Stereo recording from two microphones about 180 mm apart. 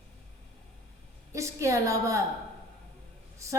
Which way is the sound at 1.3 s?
15° right (ahead or behind).